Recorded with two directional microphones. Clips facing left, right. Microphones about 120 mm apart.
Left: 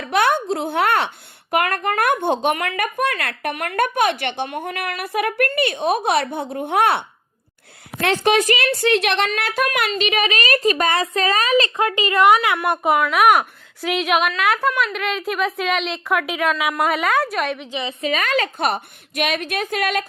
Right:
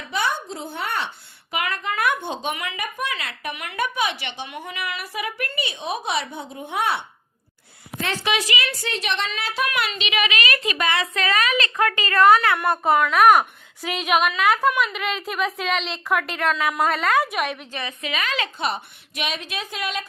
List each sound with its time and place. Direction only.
0.0 s speech: 65° left (ahead or behind)
8.8 s a woman's voice: 65° left (ahead or behind); by 17.7 s 5° right (ahead or behind)
17.7 s a woman's voice: 20° left (ahead or behind)
18.0 s speech: 45° left (ahead or behind); by 20.1 s 60° left (ahead or behind)